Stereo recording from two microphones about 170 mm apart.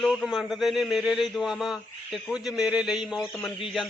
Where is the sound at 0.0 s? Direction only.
Centre (ahead or behind).